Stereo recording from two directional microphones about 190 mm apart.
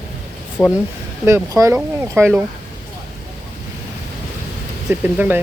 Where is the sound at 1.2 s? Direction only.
15° right (ahead or behind).